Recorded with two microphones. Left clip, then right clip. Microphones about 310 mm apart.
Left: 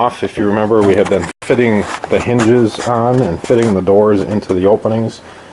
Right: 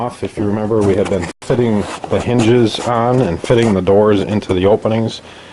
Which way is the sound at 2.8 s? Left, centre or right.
Centre.